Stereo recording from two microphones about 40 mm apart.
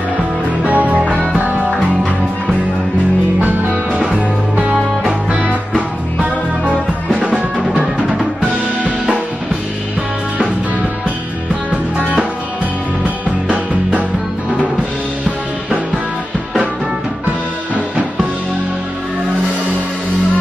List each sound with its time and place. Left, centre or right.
0.7 s music: right
7.2 s music: right
13.0 s music: right